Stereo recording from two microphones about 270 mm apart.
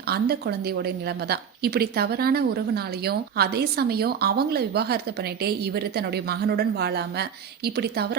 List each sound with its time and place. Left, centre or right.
0.1 s a woman's voice: right